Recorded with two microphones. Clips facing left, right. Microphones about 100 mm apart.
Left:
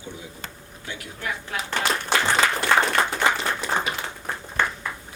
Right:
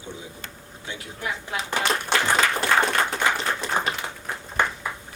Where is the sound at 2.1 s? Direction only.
Centre (ahead or behind).